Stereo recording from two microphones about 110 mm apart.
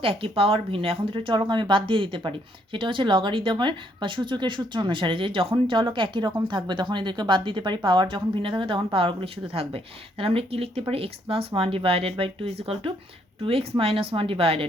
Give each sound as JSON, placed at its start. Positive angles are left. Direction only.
{"t": 0.0, "sound": "a woman's voice", "side_deg": -55}